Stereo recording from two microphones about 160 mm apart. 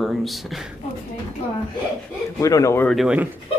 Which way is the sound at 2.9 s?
5° right (ahead or behind).